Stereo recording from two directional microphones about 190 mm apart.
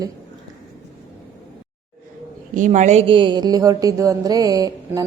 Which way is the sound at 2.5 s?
40° right (ahead or behind).